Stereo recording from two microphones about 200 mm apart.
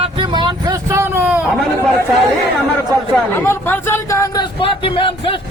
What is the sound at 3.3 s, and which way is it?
Speech, 10° left (ahead or behind).